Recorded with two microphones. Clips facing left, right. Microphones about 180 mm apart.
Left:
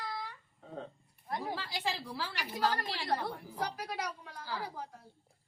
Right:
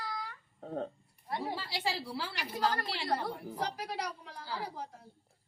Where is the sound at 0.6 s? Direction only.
55° right (ahead or behind).